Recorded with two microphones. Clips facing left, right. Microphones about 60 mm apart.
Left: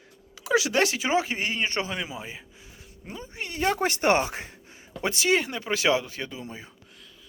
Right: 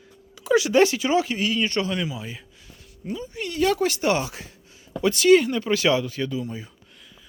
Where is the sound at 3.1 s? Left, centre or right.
Left.